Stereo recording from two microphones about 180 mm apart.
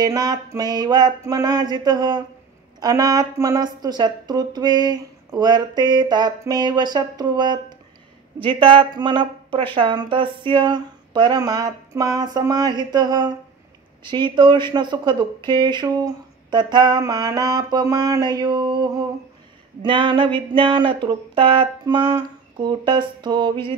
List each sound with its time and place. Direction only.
0.0 s speech: 20° right (ahead or behind)